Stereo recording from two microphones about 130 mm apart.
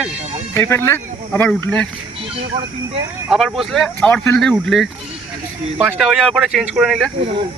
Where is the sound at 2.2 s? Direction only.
45° right (ahead or behind).